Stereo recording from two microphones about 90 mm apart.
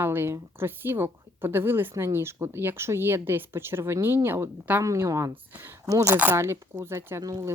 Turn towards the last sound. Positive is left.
turn(degrees=-35)  # may be behind; listen again after turning